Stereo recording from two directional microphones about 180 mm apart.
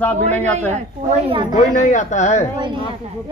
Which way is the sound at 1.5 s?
45° left (ahead or behind).